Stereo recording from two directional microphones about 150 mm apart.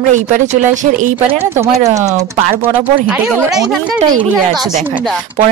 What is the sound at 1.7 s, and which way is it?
Speech, 20° right (ahead or behind).